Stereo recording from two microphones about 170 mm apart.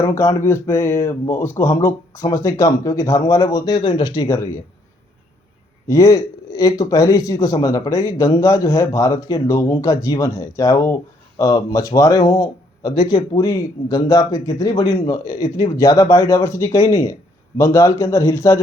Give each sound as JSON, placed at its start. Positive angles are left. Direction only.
{"t": 0.0, "sound": "speech", "side_deg": 20}
{"t": 5.9, "sound": "speech", "side_deg": 20}
{"t": 13.3, "sound": "speech", "side_deg": 20}